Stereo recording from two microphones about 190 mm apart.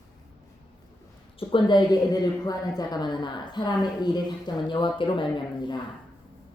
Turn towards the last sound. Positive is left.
turn(degrees=25)  # may be behind; listen again after turning